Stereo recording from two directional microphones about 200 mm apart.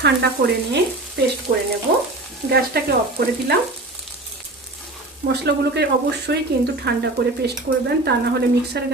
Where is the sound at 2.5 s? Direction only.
50° right (ahead or behind).